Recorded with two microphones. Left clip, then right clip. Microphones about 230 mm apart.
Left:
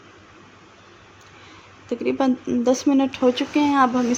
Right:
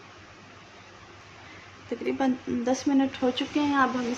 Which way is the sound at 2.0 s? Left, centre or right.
Left.